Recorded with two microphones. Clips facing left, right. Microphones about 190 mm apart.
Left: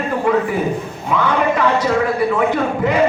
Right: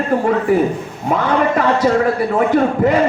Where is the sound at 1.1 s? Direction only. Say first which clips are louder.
Right 1 dB; 45° right (ahead or behind).